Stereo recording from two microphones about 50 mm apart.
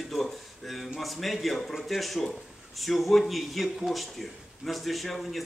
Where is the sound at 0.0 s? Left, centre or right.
Centre.